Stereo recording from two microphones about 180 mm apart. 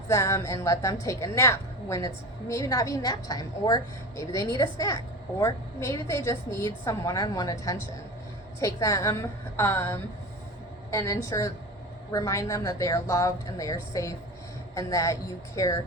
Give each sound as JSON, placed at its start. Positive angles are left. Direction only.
{"t": 0.1, "sound": "a woman's voice", "side_deg": 15}